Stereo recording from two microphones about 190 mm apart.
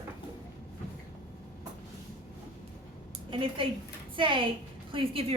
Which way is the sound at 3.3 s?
30° right (ahead or behind).